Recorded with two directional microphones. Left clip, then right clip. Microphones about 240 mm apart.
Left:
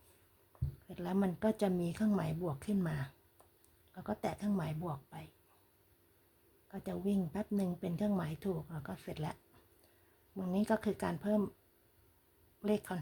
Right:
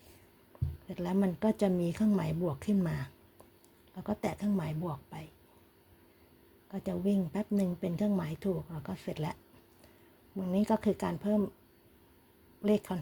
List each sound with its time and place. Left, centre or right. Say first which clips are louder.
0.9 s speech: right 4 dB; centre
6.7 s speech: right 5 dB; centre
12.6 s speech: right 5 dB; centre